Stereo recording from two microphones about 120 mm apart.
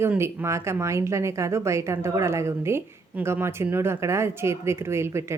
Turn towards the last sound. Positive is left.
turn(degrees=-20)  # may be behind; listen again after turning